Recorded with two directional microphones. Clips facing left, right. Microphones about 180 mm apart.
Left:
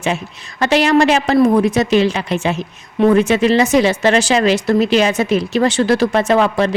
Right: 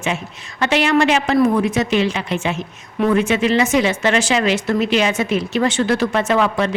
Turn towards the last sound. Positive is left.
turn(degrees=35)  # may be behind; listen again after turning